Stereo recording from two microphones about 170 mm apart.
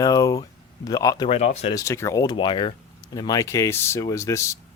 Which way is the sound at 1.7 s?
15° left (ahead or behind).